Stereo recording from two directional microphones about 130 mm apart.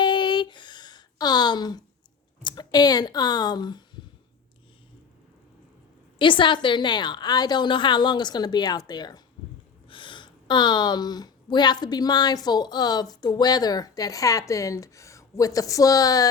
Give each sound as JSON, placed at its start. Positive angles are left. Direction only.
{"t": 0.0, "sound": "a sound", "side_deg": 35}
{"t": 2.4, "sound": "speech", "side_deg": 35}
{"t": 6.1, "sound": "speech", "side_deg": 40}